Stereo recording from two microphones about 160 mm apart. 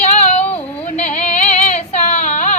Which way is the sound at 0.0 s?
45° left (ahead or behind).